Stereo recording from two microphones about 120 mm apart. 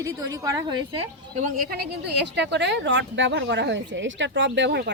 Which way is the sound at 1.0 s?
80° right.